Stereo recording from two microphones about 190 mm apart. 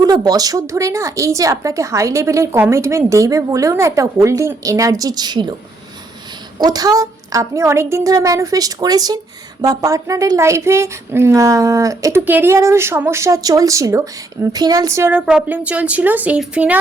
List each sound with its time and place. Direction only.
0.0 s speech: 20° right (ahead or behind)
6.6 s a woman's voice: 20° right (ahead or behind)